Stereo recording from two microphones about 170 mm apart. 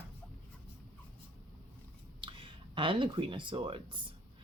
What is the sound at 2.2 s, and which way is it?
Speech, 30° right (ahead or behind).